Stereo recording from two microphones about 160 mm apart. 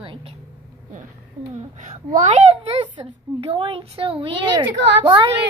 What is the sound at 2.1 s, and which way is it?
A child's voice, 45° right (ahead or behind).